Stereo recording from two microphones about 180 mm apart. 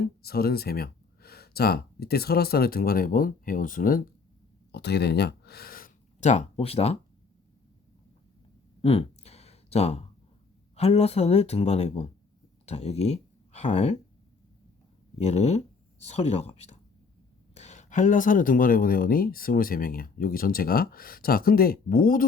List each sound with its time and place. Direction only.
0.2 s speech: 60° left (ahead or behind)
4.7 s speech: 65° left (ahead or behind); by 6.9 s 35° left (ahead or behind)
8.8 s a sound: 35° left (ahead or behind)
10.8 s speech: 35° left (ahead or behind)
15.2 s speech: 35° left (ahead or behind); by 22.3 s 55° left (ahead or behind)